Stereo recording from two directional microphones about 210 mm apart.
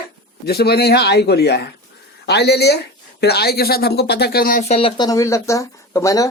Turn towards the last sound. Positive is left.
turn(degrees=15)  # may be behind; listen again after turning